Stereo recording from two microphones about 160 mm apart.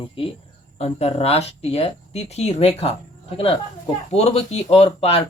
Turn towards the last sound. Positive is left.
turn(degrees=40)  # may be behind; listen again after turning